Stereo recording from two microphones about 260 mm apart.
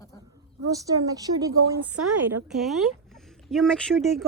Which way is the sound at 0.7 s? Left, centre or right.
Centre.